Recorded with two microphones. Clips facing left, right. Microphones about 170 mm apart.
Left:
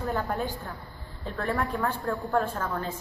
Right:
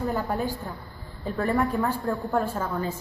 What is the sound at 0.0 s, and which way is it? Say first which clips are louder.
A woman's voice: right 2 dB; 10° right (ahead or behind).